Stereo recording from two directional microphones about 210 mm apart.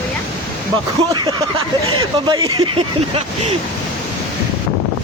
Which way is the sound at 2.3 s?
20° right (ahead or behind).